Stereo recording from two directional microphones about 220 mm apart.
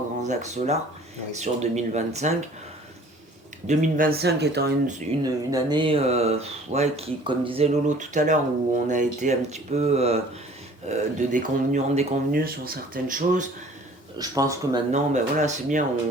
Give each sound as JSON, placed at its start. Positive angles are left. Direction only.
{"t": 0.2, "sound": "speech", "side_deg": -30}
{"t": 3.7, "sound": "speech", "side_deg": -35}
{"t": 5.2, "sound": "speech", "side_deg": -20}
{"t": 14.2, "sound": "speech", "side_deg": -15}
{"t": 14.9, "sound": "speech", "side_deg": -30}